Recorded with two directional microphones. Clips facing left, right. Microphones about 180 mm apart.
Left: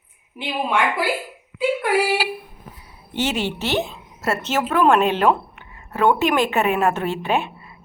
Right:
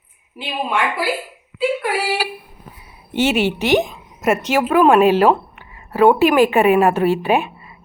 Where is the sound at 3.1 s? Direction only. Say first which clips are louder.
Right 6 dB; 15° right (ahead or behind).